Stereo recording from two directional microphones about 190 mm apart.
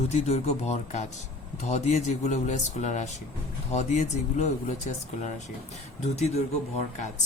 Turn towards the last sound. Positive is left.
turn(degrees=35)  # may be behind; listen again after turning